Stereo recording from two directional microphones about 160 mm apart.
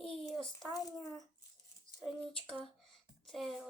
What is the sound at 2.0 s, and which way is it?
Speech, 5° left (ahead or behind).